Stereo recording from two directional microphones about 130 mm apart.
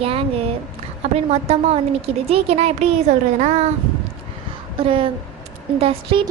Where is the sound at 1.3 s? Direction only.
55° right (ahead or behind).